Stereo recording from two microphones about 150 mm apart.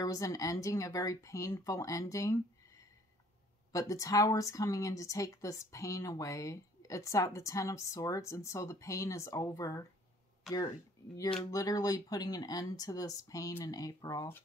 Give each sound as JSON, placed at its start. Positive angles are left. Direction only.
{"t": 0.0, "sound": "a woman's voice", "side_deg": 25}
{"t": 11.5, "sound": "a woman's voice", "side_deg": 25}